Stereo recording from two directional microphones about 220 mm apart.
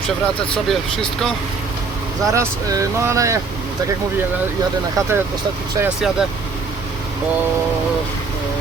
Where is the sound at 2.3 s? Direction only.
15° right (ahead or behind).